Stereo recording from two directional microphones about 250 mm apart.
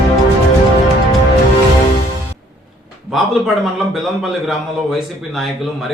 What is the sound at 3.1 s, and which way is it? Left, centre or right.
A man's voice, centre.